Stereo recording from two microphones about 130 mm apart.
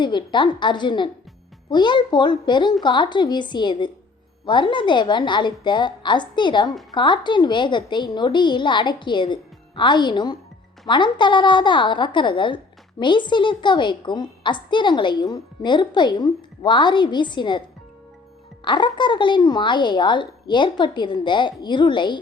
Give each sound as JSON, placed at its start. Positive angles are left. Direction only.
{"t": 0.0, "sound": "a woman's voice", "side_deg": 35}
{"t": 18.6, "sound": "a woman's voice", "side_deg": 35}